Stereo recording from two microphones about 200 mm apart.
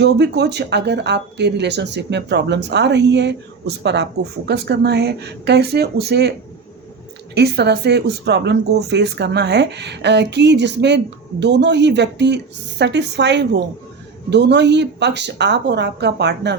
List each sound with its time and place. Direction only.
0.0 s speech: 55° right (ahead or behind)
7.3 s speech: 55° right (ahead or behind)